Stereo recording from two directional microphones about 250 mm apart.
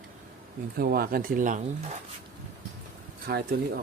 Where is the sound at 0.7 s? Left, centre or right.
Right.